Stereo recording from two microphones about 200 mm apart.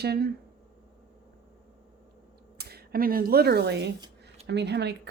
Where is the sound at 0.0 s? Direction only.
50° right (ahead or behind).